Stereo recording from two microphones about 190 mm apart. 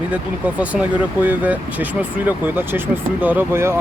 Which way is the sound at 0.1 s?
5° right (ahead or behind).